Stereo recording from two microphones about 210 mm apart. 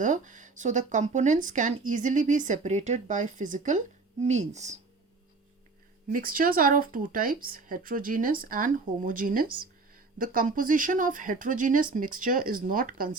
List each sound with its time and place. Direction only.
0.0 s speech: 35° right (ahead or behind)
6.1 s speech: 40° right (ahead or behind)